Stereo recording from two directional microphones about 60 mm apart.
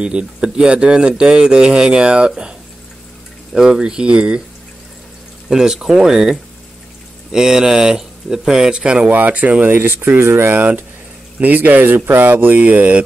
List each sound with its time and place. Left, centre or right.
0.0 s speech: centre
3.5 s speech: centre
5.5 s speech: centre
7.3 s speech: centre
9.1 s speech: right
10.0 s speech: right
10.5 s speech: right